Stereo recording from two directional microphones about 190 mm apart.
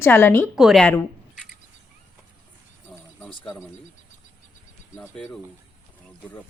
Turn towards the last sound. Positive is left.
turn(degrees=5)  # may be behind; listen again after turning